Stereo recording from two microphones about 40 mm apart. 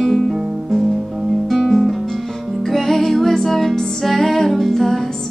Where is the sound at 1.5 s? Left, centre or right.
Centre.